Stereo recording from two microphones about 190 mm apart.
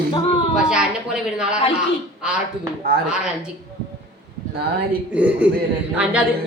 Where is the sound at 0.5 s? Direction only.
5° right (ahead or behind).